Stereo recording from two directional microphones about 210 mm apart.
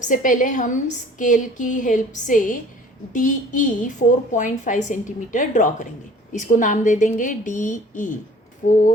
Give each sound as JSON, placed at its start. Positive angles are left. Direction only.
{"t": 0.0, "sound": "a woman's voice", "side_deg": 40}